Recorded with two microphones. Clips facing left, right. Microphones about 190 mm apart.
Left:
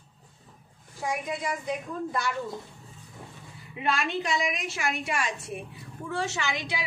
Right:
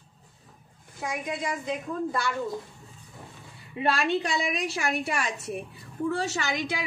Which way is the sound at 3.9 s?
35° right (ahead or behind).